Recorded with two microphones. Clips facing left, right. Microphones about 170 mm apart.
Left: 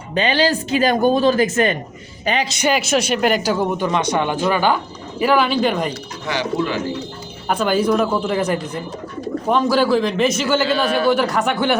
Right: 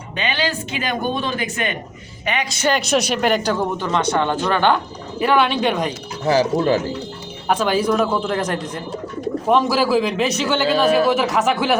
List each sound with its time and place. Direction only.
0.1 s speech: 35° left (ahead or behind)
2.5 s a man's voice: 15° left (ahead or behind)
6.2 s speech: 40° right (ahead or behind)
7.4 s a man's voice: centre (ahead or behind)